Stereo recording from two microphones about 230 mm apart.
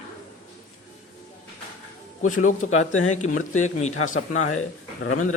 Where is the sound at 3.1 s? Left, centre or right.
Left.